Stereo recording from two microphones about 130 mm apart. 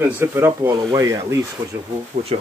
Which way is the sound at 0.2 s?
20° right (ahead or behind).